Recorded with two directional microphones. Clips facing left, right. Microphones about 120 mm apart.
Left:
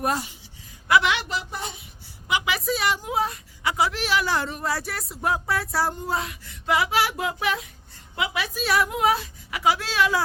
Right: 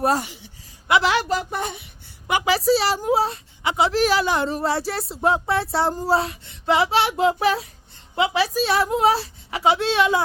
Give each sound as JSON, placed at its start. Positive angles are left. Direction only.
{"t": 0.2, "sound": "a woman's voice", "side_deg": -55}
{"t": 0.9, "sound": "a woman's voice", "side_deg": -25}
{"t": 1.1, "sound": "a woman's voice", "side_deg": -45}
{"t": 2.5, "sound": "a woman's voice", "side_deg": -30}
{"t": 3.9, "sound": "a woman's voice", "side_deg": -35}